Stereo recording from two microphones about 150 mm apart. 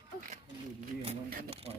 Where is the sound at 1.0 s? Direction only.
40° right (ahead or behind).